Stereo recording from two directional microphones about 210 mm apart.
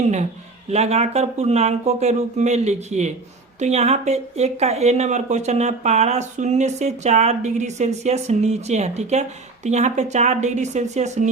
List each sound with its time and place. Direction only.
0.0 s speech: 35° right (ahead or behind)